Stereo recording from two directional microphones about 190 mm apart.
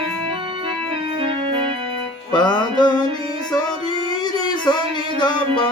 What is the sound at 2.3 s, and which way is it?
Music, 25° left (ahead or behind).